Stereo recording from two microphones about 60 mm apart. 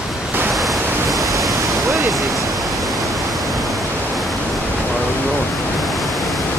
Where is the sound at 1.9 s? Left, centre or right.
Centre.